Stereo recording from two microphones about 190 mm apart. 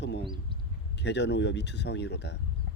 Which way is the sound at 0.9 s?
65° left (ahead or behind).